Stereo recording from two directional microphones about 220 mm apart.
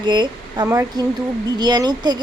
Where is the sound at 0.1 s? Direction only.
20° right (ahead or behind).